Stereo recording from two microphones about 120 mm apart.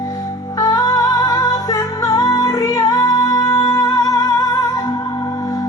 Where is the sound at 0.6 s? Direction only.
30° left (ahead or behind).